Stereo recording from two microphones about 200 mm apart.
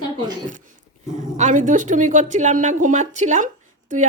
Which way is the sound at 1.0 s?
35° right (ahead or behind).